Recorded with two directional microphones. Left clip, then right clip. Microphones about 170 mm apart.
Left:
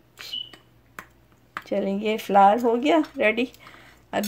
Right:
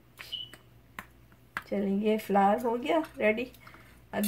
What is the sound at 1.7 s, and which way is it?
Speech, 50° left (ahead or behind).